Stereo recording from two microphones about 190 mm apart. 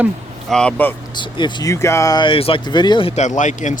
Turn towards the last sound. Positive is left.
turn(degrees=40)  # may be behind; listen again after turning